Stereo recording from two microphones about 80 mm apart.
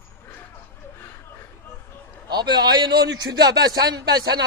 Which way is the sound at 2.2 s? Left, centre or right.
Right.